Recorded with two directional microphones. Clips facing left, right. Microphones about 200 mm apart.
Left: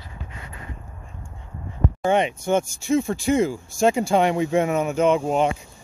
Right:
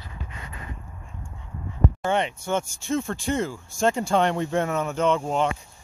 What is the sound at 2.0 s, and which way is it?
Speech, 15° left (ahead or behind).